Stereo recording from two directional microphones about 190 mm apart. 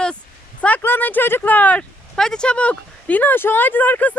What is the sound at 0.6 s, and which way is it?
Speech, 10° left (ahead or behind).